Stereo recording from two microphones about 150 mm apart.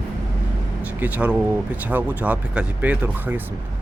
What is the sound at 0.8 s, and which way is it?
Speech, 10° right (ahead or behind).